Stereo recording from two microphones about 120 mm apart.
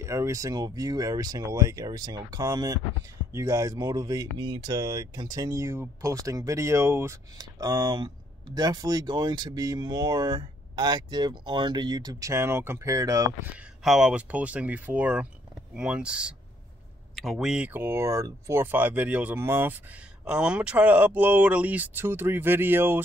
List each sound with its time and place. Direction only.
0.0 s speech: 25° right (ahead or behind)
13.8 s speech: 5° right (ahead or behind)
17.7 s speech: 20° right (ahead or behind)
20.2 s speech: 10° right (ahead or behind)